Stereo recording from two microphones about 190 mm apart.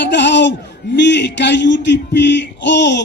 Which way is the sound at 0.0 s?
65° left (ahead or behind).